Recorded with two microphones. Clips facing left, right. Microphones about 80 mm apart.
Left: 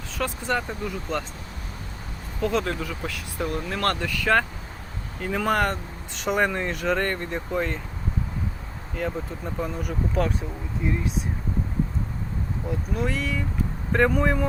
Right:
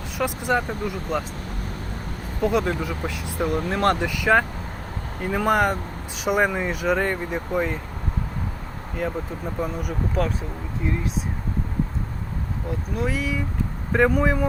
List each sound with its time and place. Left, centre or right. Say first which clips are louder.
0.2 s speech: right 3 dB; centre
2.4 s speech: right 3 dB; centre
9.0 s speech: right 2 dB; centre
12.6 s speech: right 1 dB; centre